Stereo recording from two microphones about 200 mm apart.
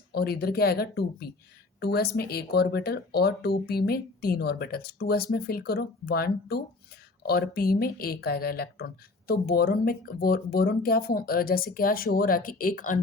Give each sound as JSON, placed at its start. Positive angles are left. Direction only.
{"t": 0.1, "sound": "speech", "side_deg": 50}